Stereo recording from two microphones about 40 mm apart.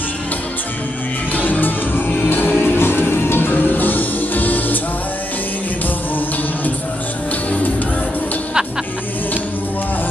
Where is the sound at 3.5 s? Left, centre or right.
Left.